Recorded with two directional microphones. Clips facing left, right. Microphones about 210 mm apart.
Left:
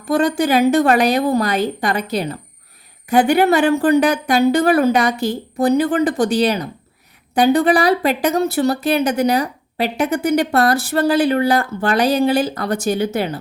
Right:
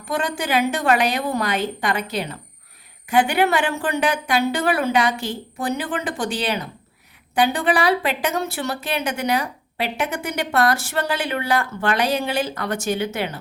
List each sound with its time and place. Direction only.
0.1 s speech: 40° left (ahead or behind)